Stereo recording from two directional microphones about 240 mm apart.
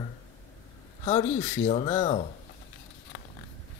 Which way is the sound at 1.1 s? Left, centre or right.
Left.